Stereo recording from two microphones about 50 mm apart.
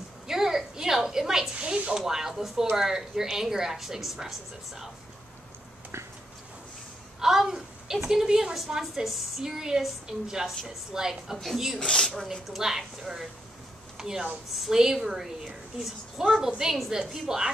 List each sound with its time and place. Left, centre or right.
0.3 s a woman's voice: centre
7.2 s a woman's voice: centre
11.8 s speech: centre
12.3 s a woman's voice: centre